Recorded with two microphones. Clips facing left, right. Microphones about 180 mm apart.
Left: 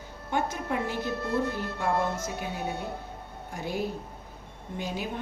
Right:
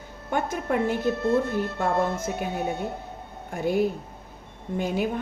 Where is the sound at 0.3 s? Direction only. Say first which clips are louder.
Right 3 dB; 50° right (ahead or behind).